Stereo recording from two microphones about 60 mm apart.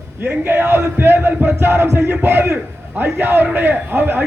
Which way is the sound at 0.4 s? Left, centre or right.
Right.